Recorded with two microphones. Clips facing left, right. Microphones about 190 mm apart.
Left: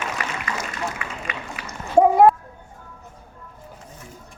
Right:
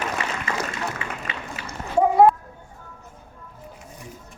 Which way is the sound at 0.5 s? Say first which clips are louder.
Right 1 dB; 25° right (ahead or behind).